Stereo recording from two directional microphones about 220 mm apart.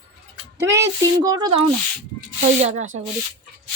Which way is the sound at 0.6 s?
15° right (ahead or behind).